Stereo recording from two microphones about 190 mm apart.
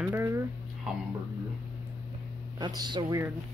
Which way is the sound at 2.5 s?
20° right (ahead or behind).